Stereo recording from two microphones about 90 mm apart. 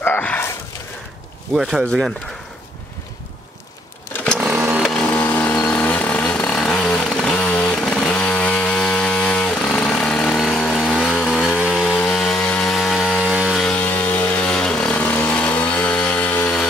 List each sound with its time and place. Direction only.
0.0 s dog: 20° left (ahead or behind)
1.5 s speech: 5° right (ahead or behind)
4.9 s vehicle: 15° left (ahead or behind)
5.7 s motorcycle: 20° left (ahead or behind)
11.6 s chainsaw: centre (ahead or behind)
13.2 s chainsaw: 10° right (ahead or behind)
13.6 s a sound: 5° left (ahead or behind)
13.8 s vehicle: 20° left (ahead or behind)